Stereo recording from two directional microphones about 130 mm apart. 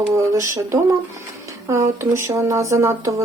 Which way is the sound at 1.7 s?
25° right (ahead or behind).